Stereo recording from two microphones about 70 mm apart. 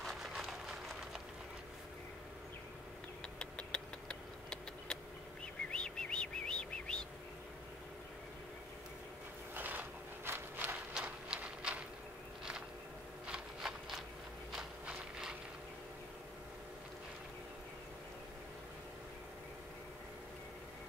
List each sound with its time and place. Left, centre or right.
0.0 s a sound: centre
3.3 s rodents: centre
5.4 s chirp: centre
9.5 s walk: right
10.9 s horse: centre
13.3 s a sound: centre
14.5 s mechanisms: centre